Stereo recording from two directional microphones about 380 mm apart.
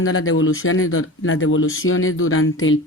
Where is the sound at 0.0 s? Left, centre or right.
Left.